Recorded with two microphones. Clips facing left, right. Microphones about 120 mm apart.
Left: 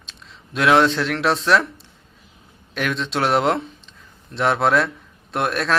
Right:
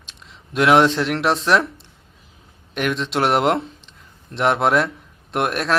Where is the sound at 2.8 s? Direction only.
10° right (ahead or behind).